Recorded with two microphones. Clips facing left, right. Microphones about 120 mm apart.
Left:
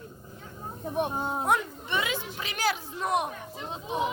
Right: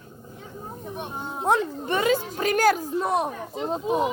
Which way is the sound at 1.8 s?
40° right (ahead or behind).